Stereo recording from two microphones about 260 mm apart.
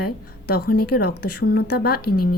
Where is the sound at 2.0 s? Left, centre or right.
Left.